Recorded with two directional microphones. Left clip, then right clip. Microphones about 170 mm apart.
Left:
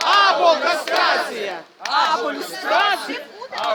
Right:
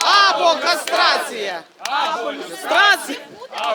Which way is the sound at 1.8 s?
60° right (ahead or behind).